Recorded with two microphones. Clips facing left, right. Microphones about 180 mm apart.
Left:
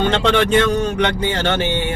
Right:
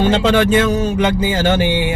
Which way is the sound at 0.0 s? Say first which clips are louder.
Right 3 dB; 5° right (ahead or behind).